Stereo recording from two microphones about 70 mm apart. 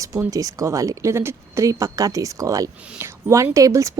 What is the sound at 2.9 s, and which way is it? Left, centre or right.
Speech, right.